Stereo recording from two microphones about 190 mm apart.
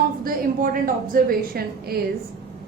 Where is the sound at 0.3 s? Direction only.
50° right (ahead or behind).